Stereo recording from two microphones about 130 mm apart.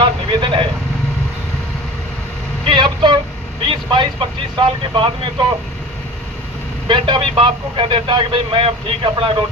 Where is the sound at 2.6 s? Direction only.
35° right (ahead or behind).